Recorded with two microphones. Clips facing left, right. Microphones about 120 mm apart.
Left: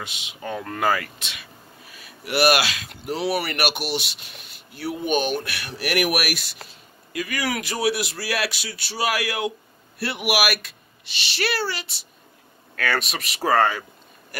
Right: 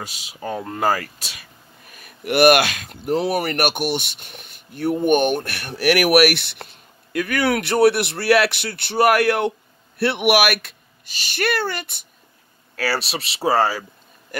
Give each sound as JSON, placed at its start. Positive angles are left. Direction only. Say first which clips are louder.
{"t": 0.0, "sound": "speech", "louder": "right 3 dB", "side_deg": -35}
{"t": 12.7, "sound": "speech", "louder": "right 2 dB", "side_deg": -35}